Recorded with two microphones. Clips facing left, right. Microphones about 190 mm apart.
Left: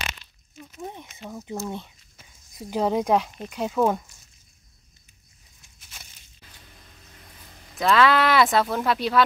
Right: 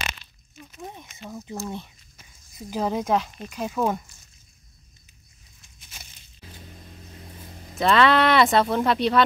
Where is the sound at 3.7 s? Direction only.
5° left (ahead or behind).